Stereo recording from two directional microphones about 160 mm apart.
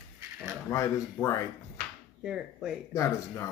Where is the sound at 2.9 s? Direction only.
20° left (ahead or behind).